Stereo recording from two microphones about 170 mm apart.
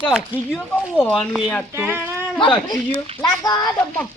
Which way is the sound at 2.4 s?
30° left (ahead or behind).